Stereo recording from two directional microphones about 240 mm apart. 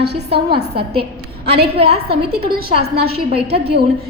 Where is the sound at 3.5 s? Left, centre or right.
Right.